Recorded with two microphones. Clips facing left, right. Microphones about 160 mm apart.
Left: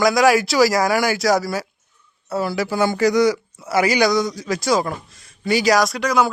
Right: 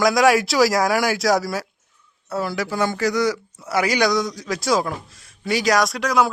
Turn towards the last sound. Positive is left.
turn(degrees=0)  # may be behind; listen again after turning